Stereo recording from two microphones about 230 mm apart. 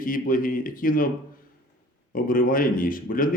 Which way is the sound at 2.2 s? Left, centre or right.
Left.